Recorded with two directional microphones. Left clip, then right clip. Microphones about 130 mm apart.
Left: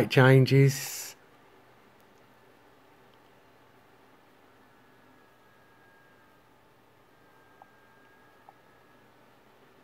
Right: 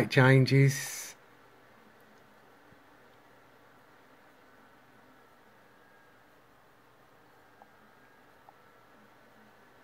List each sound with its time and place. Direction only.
0.0 s speech: 15° left (ahead or behind)